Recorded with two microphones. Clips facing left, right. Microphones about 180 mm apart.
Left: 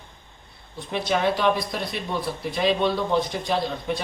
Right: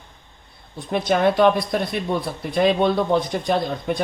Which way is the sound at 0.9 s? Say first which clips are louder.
Right 5 dB; 50° right (ahead or behind).